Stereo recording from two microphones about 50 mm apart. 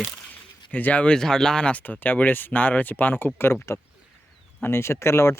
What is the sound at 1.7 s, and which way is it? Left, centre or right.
Speech, left.